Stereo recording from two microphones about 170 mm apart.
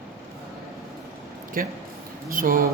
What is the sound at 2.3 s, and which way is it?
Speech, 55° right (ahead or behind).